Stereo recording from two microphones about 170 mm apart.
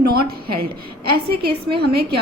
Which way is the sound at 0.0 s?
65° right (ahead or behind).